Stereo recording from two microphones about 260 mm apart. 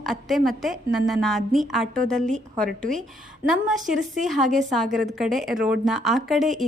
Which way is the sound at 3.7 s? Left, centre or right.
Centre.